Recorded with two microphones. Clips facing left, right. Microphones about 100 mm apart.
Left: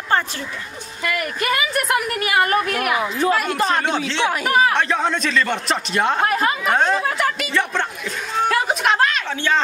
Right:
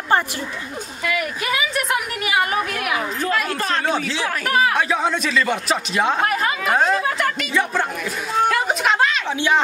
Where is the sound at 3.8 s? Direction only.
5° right (ahead or behind).